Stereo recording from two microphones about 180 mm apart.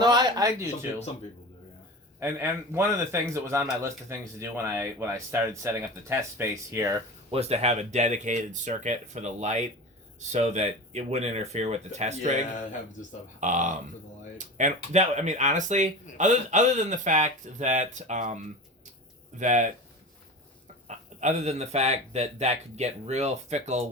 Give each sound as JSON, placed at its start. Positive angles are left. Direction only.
{"t": 0.0, "sound": "speech", "side_deg": -25}
{"t": 2.2, "sound": "speech", "side_deg": -15}
{"t": 7.3, "sound": "speech", "side_deg": -35}
{"t": 13.4, "sound": "speech", "side_deg": -45}
{"t": 20.8, "sound": "speech", "side_deg": -40}